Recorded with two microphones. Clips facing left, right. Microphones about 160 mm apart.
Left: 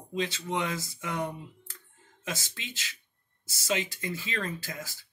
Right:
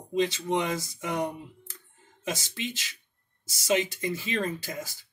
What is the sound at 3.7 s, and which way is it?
Speech, 20° right (ahead or behind).